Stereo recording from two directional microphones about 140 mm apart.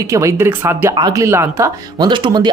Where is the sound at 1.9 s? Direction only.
35° right (ahead or behind).